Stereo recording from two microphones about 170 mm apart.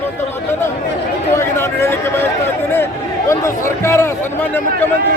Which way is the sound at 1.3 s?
15° left (ahead or behind).